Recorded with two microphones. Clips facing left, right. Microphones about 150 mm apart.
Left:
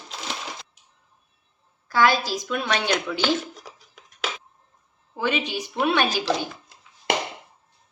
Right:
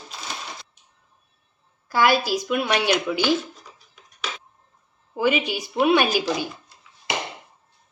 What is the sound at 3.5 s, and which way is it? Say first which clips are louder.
Music: left 4 dB; 90° left.